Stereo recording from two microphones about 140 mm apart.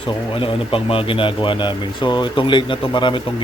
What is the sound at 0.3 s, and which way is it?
Speech, 40° left (ahead or behind).